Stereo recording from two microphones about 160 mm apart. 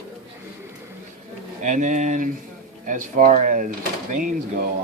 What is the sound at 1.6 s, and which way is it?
Speech, 50° right (ahead or behind).